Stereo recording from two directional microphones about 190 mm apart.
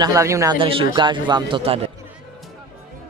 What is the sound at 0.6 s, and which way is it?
A man's voice, 25° right (ahead or behind).